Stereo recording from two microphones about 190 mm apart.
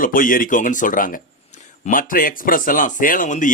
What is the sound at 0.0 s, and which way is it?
Speech, 45° left (ahead or behind).